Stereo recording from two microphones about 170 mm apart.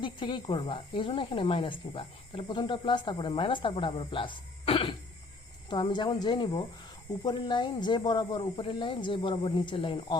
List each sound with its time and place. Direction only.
0.0 s speech: 30° left (ahead or behind)